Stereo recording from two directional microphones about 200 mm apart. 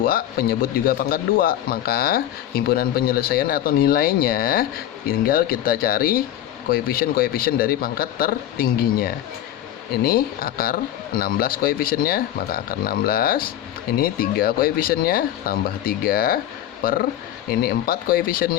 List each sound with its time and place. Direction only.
0.0 s speech: 50° left (ahead or behind)